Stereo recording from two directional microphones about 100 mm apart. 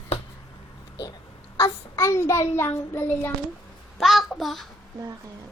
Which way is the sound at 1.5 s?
35° left (ahead or behind).